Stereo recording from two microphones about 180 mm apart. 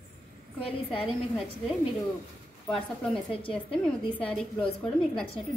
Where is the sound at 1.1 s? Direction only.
Centre (ahead or behind).